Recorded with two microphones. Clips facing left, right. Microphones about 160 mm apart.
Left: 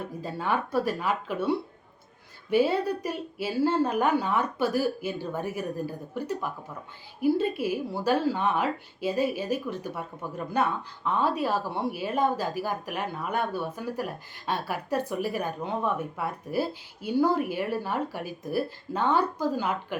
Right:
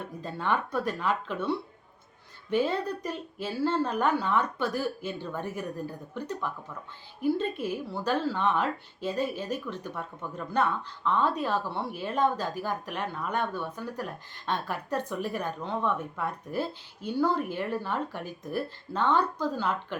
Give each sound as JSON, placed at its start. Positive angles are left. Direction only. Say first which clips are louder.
{"t": 0.0, "sound": "speech", "louder": "left 1 dB", "side_deg": 10}